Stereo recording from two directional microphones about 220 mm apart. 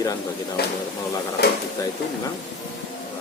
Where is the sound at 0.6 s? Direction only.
45° left (ahead or behind).